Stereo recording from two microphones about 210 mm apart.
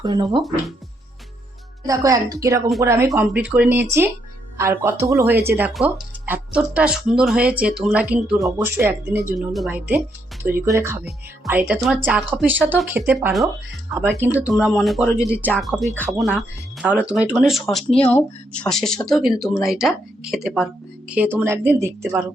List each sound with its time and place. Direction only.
0.0 s speech: 20° right (ahead or behind)
1.9 s speech: 15° right (ahead or behind)